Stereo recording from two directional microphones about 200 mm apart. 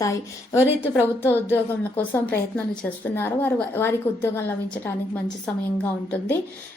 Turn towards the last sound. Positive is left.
turn(degrees=10)  # may be behind; listen again after turning